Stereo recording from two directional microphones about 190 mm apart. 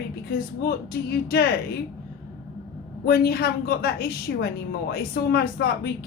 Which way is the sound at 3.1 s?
55° left (ahead or behind).